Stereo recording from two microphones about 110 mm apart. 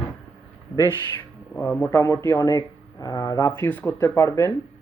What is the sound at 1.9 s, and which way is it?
Speech, 25° left (ahead or behind).